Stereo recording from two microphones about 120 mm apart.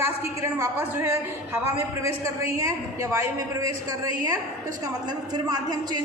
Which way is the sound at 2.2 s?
25° right (ahead or behind).